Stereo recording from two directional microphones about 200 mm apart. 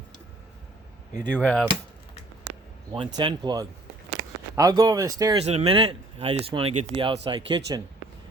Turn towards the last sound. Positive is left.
turn(degrees=-20)  # may be behind; listen again after turning